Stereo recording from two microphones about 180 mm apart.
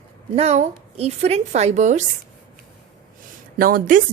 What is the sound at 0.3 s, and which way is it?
A woman's voice, 40° right (ahead or behind).